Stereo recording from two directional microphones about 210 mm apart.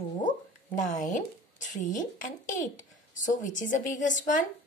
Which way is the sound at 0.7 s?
35° left (ahead or behind).